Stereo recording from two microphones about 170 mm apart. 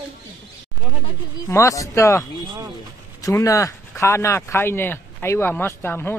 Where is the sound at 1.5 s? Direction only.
20° left (ahead or behind).